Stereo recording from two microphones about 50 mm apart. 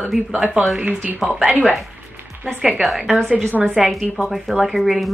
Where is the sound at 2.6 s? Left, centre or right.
Centre.